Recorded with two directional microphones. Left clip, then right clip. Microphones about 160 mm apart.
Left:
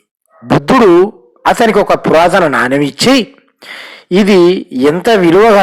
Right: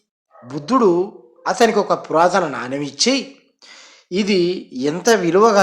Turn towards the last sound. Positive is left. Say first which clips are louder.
# left 7 dB
turn(degrees=50)  # may be behind; listen again after turning